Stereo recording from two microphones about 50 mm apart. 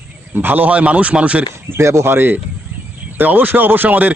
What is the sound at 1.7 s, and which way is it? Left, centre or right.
Speech, right.